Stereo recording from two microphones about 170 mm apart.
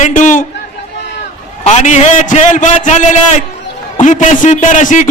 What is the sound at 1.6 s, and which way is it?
Speech, 45° left (ahead or behind).